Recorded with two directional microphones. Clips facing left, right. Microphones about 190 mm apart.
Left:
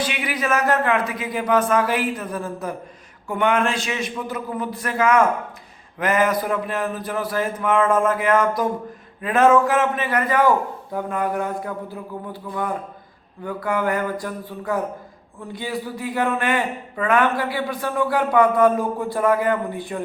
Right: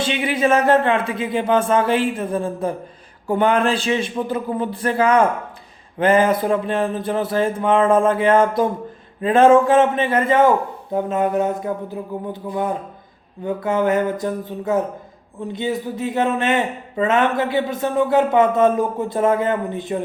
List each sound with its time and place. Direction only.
0.0 s a man's voice: 25° right (ahead or behind)